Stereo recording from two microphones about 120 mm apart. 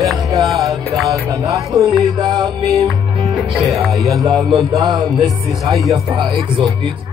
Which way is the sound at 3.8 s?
Centre (ahead or behind).